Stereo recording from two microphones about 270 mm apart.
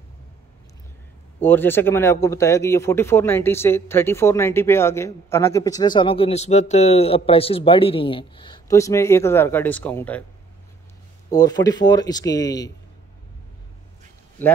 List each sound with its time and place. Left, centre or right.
1.4 s speech: centre
11.2 s speech: centre